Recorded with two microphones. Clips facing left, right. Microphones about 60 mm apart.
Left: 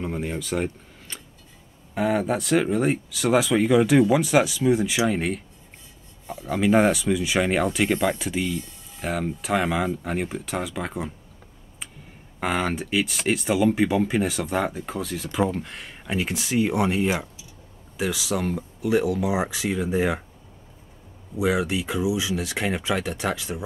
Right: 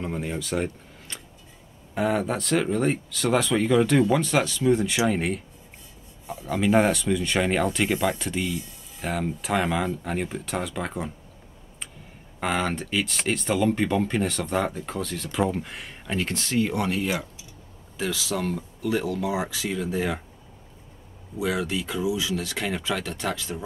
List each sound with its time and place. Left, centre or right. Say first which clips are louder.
0.0 s a sound: left 1 dB; centre
2.0 s speech: left 2 dB; centre
12.4 s speech: left 1 dB; centre
21.4 s speech: left 3 dB; centre